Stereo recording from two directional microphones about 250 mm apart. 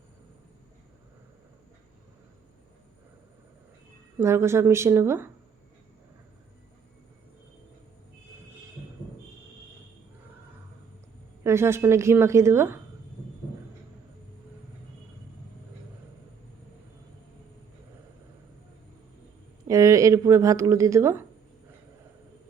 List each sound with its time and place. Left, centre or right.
4.2 s a woman's voice: centre
11.4 s a woman's voice: centre
19.6 s speech: centre